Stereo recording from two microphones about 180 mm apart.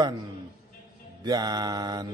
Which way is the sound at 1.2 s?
25° right (ahead or behind).